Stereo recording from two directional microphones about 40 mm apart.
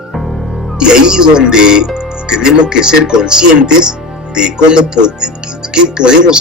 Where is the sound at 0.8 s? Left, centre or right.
Centre.